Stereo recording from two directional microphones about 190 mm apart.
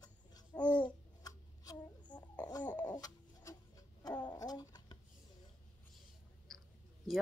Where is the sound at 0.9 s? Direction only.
20° left (ahead or behind).